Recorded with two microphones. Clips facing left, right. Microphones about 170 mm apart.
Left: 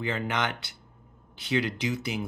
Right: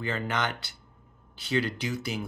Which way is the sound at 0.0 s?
15° left (ahead or behind).